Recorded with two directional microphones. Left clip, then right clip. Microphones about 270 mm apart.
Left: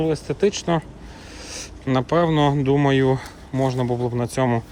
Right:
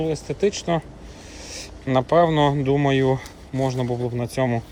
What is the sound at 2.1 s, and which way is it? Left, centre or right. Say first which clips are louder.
Speech: right 2 dB; centre.